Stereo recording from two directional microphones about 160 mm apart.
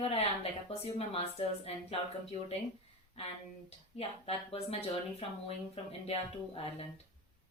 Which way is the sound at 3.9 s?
35° left (ahead or behind).